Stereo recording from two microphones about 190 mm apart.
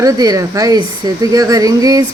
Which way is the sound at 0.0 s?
20° right (ahead or behind).